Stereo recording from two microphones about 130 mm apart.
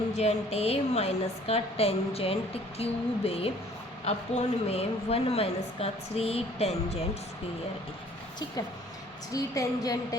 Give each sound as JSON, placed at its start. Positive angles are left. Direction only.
{"t": 0.2, "sound": "a woman's voice", "side_deg": 50}
{"t": 9.3, "sound": "a woman's voice", "side_deg": 30}